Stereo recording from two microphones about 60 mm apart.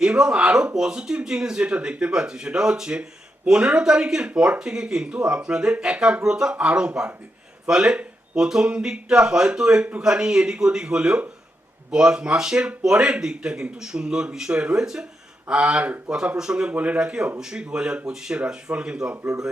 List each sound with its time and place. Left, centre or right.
0.0 s speech: centre
16.7 s speech: right
19.1 s speech: right